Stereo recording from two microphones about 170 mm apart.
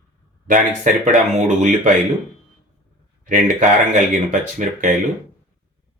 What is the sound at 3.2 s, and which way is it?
Speech, 50° right (ahead or behind).